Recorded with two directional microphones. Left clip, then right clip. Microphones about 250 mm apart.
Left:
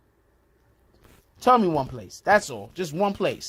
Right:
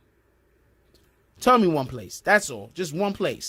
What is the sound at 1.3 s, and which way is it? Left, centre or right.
Speech, right.